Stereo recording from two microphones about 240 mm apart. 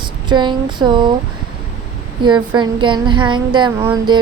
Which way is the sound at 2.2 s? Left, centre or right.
Centre.